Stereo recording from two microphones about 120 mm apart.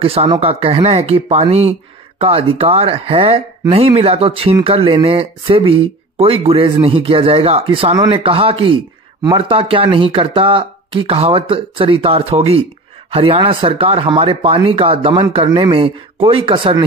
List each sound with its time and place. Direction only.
0.0 s speech: 55° right (ahead or behind)